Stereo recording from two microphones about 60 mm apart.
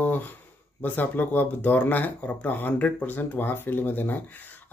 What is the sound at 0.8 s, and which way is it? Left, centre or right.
Speech, left.